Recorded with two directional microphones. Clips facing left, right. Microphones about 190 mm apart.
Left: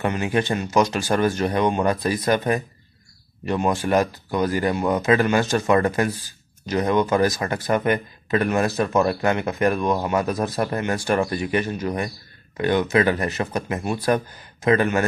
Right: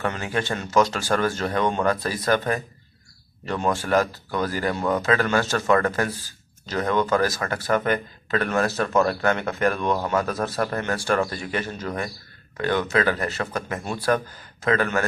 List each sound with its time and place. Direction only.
0.0 s speech: 20° left (ahead or behind)